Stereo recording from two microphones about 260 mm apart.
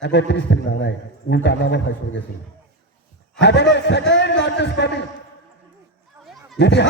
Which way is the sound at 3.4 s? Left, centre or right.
Left.